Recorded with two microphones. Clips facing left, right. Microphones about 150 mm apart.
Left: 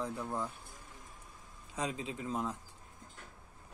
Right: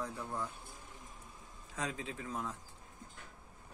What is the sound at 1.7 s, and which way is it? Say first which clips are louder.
Speech: left 3 dB; 15° left (ahead or behind).